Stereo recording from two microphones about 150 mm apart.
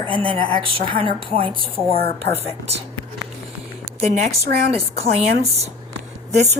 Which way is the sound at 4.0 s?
50° right (ahead or behind).